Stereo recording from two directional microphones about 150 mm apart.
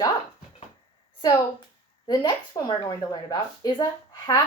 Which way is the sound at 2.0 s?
30° left (ahead or behind).